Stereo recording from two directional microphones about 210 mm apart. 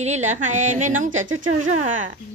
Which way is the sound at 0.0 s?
35° right (ahead or behind).